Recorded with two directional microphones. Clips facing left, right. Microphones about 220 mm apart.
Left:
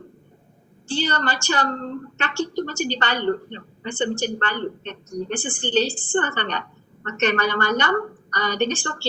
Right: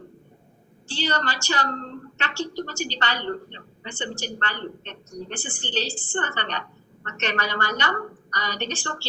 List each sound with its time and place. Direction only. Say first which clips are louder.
1.0 s a woman's voice: even; 55° left (ahead or behind)